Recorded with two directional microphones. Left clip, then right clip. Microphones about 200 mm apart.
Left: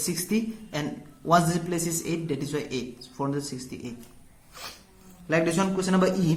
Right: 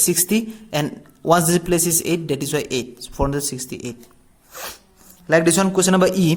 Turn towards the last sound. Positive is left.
turn(degrees=-50)  # may be behind; listen again after turning